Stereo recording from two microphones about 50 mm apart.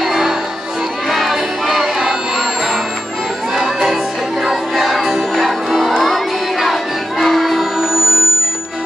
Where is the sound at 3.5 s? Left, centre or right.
Centre.